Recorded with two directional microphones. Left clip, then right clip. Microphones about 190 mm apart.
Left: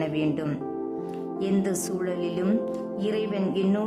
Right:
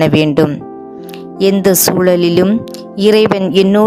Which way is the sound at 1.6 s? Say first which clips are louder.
Right 18 dB; 50° right (ahead or behind).